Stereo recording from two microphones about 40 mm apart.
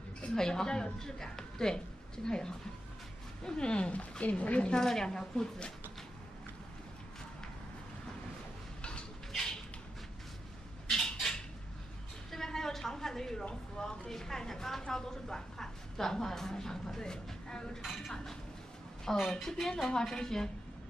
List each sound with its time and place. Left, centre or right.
0.2 s speech: centre; by 4.7 s left
4.7 s speech: centre
10.9 s a sound: centre
13.7 s a woman's voice: centre
17.8 s speech: centre
18.1 s chink: centre
19.1 s a woman's voice: centre
19.4 s speech: centre